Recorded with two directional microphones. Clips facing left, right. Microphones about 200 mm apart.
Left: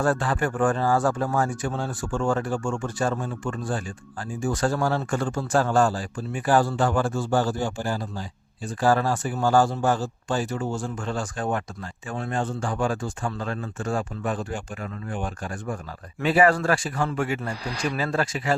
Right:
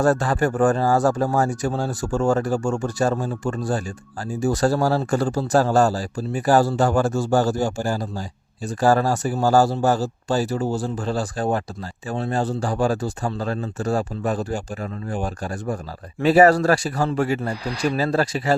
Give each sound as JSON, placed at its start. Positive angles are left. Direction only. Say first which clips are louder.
{"t": 0.0, "sound": "speech", "louder": "right 5 dB", "side_deg": -40}